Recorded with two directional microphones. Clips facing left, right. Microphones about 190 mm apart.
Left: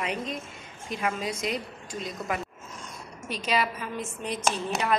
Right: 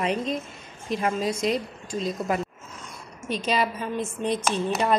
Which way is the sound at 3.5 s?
30° right (ahead or behind).